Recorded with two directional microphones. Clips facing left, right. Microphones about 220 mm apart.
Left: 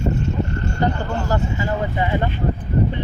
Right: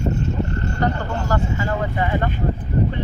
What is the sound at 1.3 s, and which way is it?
Speech, 25° left (ahead or behind).